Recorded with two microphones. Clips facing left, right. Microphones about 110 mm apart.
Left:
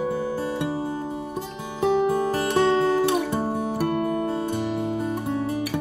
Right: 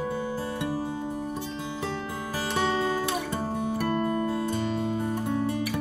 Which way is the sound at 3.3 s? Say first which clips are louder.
Left 4 dB; 15° left (ahead or behind).